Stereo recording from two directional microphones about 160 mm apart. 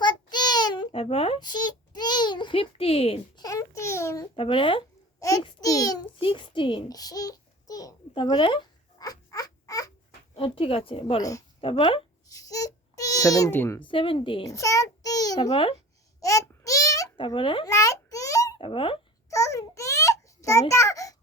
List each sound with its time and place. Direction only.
0.0 s child singing: 25° left (ahead or behind)
3.4 s a sound: 20° left (ahead or behind)
4.4 s a child's voice: 35° left (ahead or behind)
6.1 s babbling: 35° left (ahead or behind)
10.3 s speech: 35° left (ahead or behind)
11.2 s a child's voice: 20° left (ahead or behind)
11.6 s speech: 35° left (ahead or behind)
12.3 s speech: 20° left (ahead or behind)
13.8 s speech: 30° left (ahead or behind)
14.4 s a child's voice: 20° left (ahead or behind)
16.2 s babbling: 20° left (ahead or behind)
18.6 s speech: 35° left (ahead or behind)
19.3 s a child's voice: 20° left (ahead or behind)